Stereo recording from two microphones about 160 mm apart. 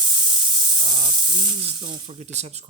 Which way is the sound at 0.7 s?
30° right (ahead or behind).